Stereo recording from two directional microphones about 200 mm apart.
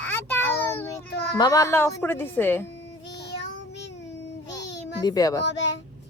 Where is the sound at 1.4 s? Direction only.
15° left (ahead or behind).